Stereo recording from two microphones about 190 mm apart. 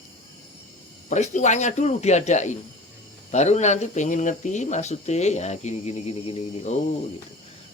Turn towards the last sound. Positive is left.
turn(degrees=35)  # may be behind; listen again after turning